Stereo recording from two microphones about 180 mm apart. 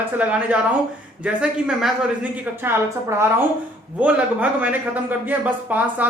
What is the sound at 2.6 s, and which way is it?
A man's voice, 15° right (ahead or behind).